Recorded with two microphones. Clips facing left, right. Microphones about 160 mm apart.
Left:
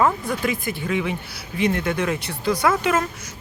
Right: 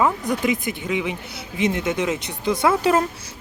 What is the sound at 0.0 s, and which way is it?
Speech, 20° right (ahead or behind).